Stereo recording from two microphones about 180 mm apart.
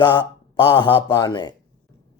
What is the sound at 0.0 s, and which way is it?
Speech, 25° left (ahead or behind).